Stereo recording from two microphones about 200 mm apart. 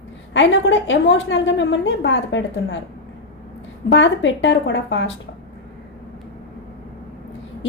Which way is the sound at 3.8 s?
65° left (ahead or behind).